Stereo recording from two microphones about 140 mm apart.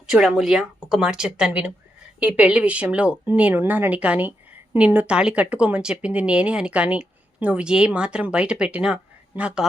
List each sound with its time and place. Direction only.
0.1 s speech: 5° right (ahead or behind)